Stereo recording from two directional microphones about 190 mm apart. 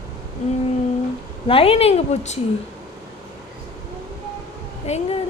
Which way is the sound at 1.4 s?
30° left (ahead or behind).